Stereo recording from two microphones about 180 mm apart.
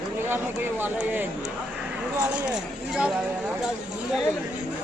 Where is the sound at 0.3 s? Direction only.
10° right (ahead or behind).